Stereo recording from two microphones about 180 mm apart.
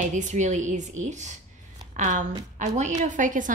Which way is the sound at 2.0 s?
45° right (ahead or behind).